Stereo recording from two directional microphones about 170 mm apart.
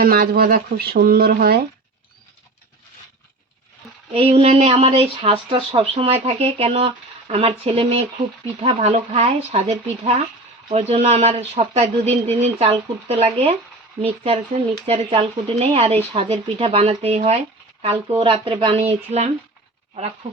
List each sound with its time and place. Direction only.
0.0 s speech: 60° right (ahead or behind)
4.1 s speech: 35° right (ahead or behind)